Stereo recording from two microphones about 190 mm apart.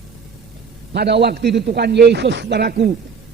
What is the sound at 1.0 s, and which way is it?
A man's voice, 60° right (ahead or behind).